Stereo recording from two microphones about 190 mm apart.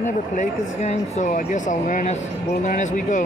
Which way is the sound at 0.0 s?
40° left (ahead or behind).